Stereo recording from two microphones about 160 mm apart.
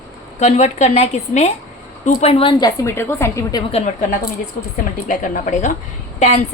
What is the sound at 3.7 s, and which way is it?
Speech, 40° left (ahead or behind).